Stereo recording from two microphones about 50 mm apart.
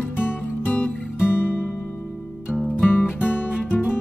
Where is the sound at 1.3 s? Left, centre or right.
Left.